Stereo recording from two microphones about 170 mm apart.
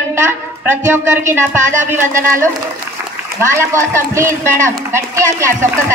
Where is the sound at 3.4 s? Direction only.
15° right (ahead or behind).